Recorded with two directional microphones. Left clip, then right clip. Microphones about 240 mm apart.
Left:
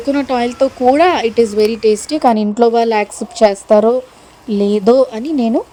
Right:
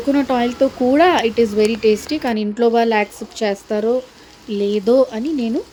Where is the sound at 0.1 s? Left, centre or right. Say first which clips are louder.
Left 2 dB; left.